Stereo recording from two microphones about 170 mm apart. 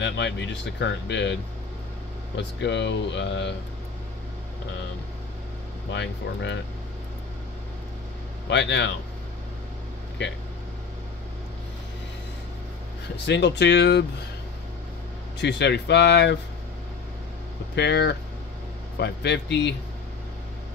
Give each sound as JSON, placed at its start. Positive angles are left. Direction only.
{"t": 0.0, "sound": "speech", "side_deg": 90}
{"t": 5.9, "sound": "speech", "side_deg": 90}
{"t": 8.5, "sound": "speech", "side_deg": 90}
{"t": 10.2, "sound": "speech", "side_deg": 90}
{"t": 13.3, "sound": "speech", "side_deg": 90}
{"t": 15.3, "sound": "speech", "side_deg": 85}
{"t": 17.7, "sound": "speech", "side_deg": 80}